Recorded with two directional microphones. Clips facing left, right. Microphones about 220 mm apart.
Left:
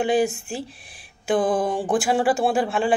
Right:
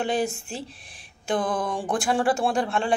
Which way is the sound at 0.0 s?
5° left (ahead or behind).